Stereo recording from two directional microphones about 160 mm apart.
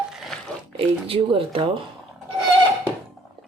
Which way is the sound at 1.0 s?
35° right (ahead or behind).